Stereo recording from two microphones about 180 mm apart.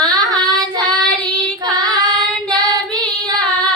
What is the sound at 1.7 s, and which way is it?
Child singing, 20° right (ahead or behind).